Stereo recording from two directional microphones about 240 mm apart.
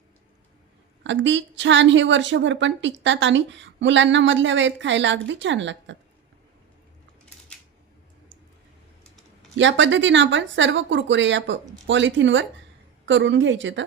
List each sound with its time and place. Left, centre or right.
1.0 s a woman's voice: right
9.6 s a woman's voice: right